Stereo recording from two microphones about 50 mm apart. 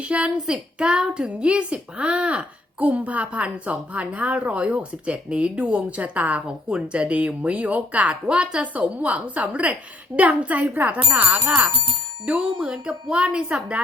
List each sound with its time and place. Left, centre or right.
0.0 s speech: right
6.7 s speech: centre
8.6 s a woman's voice: right